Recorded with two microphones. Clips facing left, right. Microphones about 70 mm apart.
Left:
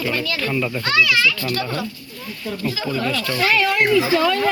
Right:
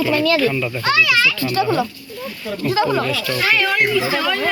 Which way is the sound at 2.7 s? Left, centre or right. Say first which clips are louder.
Right 8 dB; right.